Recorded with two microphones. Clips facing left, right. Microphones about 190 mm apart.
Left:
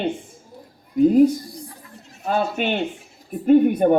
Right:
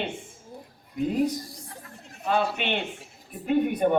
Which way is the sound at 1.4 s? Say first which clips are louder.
Left 8 dB; 90° right.